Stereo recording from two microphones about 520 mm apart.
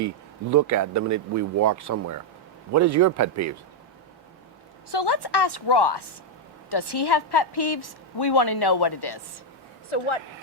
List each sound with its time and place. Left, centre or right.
0.5 s speech: right
4.9 s a woman's voice: left
9.9 s speech: left